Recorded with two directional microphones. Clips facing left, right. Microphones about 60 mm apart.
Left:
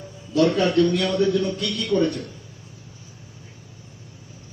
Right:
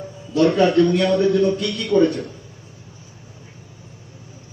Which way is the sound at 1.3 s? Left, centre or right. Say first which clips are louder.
Right 5 dB; right.